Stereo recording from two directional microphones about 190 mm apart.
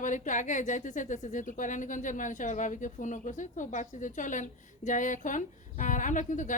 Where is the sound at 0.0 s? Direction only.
40° left (ahead or behind).